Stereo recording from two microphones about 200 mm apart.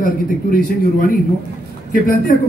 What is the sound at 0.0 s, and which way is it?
Speech, 45° left (ahead or behind).